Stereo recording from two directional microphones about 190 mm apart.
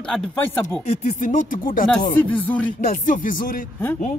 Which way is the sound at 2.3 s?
10° left (ahead or behind).